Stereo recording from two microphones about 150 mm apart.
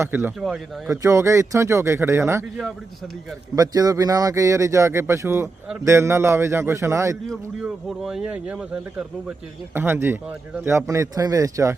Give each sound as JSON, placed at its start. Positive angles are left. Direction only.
{"t": 0.0, "sound": "a man's voice", "side_deg": -15}
{"t": 0.3, "sound": "speech", "side_deg": 0}
{"t": 1.0, "sound": "speech", "side_deg": -20}
{"t": 3.5, "sound": "a man's voice", "side_deg": -25}
{"t": 7.3, "sound": "speech", "side_deg": 0}